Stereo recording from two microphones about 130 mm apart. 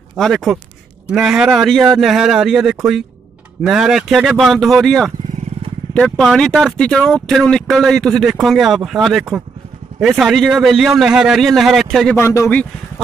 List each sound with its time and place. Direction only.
0.2 s speech: centre (ahead or behind)
12.2 s speech: 25° left (ahead or behind)